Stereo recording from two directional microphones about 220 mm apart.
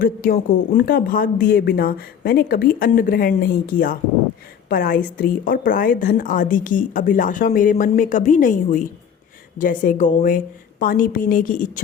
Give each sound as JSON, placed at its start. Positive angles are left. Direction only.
{"t": 0.0, "sound": "a woman's voice", "side_deg": 40}